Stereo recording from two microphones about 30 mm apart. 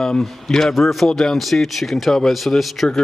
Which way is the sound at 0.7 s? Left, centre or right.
Centre.